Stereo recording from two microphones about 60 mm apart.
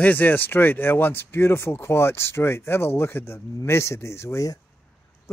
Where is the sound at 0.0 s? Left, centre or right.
Left.